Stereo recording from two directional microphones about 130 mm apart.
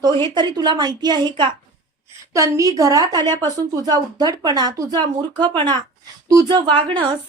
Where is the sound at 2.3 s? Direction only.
25° right (ahead or behind).